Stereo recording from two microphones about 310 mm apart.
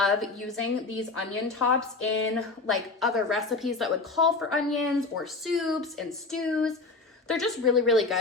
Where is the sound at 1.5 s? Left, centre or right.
Left.